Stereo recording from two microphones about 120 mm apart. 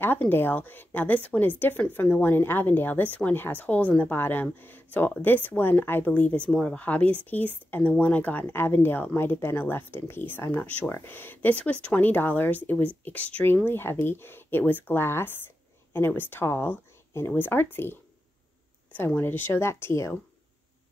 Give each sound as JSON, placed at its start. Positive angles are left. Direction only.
{"t": 0.0, "sound": "speech", "side_deg": 15}
{"t": 18.9, "sound": "speech", "side_deg": 15}